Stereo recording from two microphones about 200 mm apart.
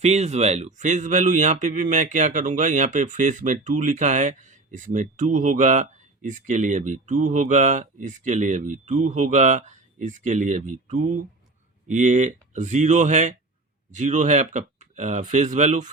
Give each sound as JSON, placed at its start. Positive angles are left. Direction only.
{"t": 0.0, "sound": "a man's voice", "side_deg": -35}